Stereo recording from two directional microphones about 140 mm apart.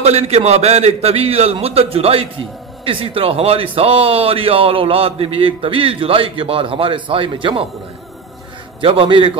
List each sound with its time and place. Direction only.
0.0 s a man's voice: 50° right (ahead or behind)
8.8 s a man's voice: 40° right (ahead or behind)